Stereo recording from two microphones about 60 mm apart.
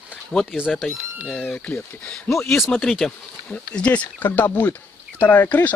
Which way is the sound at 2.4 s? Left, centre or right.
Centre.